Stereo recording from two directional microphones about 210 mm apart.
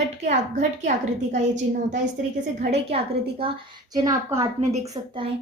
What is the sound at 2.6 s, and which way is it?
Speech, 30° right (ahead or behind).